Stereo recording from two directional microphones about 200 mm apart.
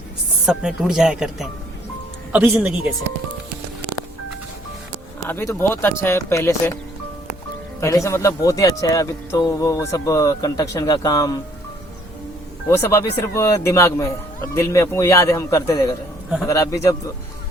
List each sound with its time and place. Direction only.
0.4 s speech: 5° right (ahead or behind)
5.3 s a man's voice: 10° left (ahead or behind)
7.8 s a man's voice: 15° left (ahead or behind)
12.6 s a man's voice: 15° left (ahead or behind)